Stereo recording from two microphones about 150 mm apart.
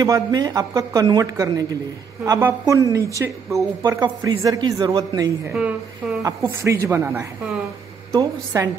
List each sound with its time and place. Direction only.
0.0 s a woman's voice: 25° right (ahead or behind)
5.5 s a woman's voice: 10° right (ahead or behind)